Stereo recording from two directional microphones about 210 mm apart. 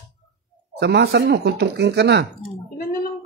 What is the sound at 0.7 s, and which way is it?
Speech, 50° right (ahead or behind).